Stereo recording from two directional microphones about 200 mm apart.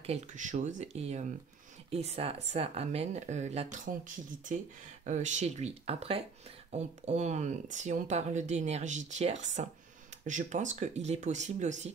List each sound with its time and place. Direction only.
0.0 s speech: 35° right (ahead or behind)
5.0 s speech: 35° right (ahead or behind)